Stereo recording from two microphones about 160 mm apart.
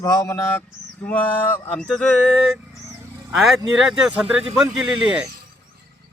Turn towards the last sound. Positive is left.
turn(degrees=-5)  # may be behind; listen again after turning